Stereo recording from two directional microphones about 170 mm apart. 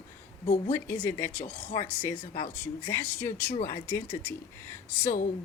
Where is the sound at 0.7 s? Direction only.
15° left (ahead or behind).